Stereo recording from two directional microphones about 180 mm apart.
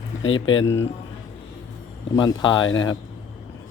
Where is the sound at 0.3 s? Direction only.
25° left (ahead or behind).